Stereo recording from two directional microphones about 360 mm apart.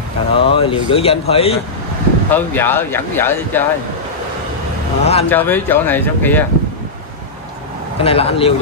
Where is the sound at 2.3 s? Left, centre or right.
Centre.